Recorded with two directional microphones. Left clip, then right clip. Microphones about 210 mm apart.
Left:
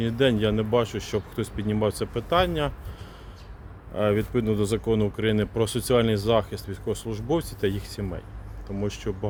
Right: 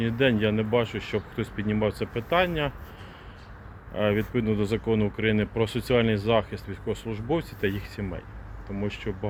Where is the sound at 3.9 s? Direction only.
15° left (ahead or behind).